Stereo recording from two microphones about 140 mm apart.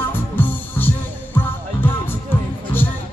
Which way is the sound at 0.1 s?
15° left (ahead or behind).